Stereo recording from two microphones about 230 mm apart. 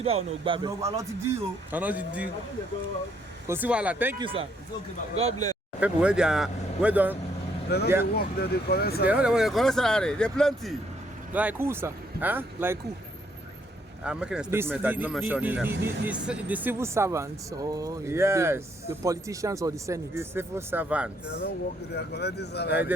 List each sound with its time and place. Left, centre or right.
0.0 s speech: right; by 2.2 s centre
3.4 s speech: centre
4.2 s speech: right
5.8 s speech: centre
7.7 s speech: left
9.0 s speech: centre
14.0 s speech: centre
21.9 s speech: left